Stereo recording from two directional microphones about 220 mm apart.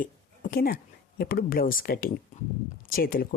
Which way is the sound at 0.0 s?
40° left (ahead or behind).